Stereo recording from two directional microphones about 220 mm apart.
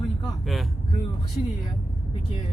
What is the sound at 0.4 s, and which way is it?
Vehicle, centre (ahead or behind).